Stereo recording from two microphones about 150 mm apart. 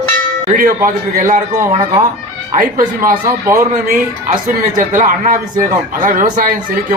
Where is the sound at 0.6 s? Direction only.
65° right (ahead or behind).